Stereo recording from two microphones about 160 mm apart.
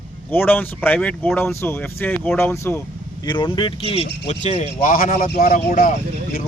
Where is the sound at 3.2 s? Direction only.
30° left (ahead or behind); by 5.9 s 55° left (ahead or behind).